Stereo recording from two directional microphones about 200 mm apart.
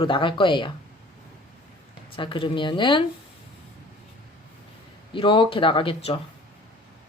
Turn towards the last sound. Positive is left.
turn(degrees=30)  # may be behind; listen again after turning